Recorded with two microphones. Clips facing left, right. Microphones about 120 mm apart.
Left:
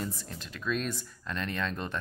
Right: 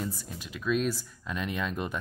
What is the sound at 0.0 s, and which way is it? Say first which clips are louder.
Speech: right 1 dB; 5° right (ahead or behind).